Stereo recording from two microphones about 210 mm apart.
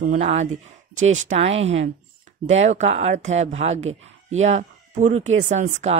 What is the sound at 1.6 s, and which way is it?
Speech, 65° right (ahead or behind).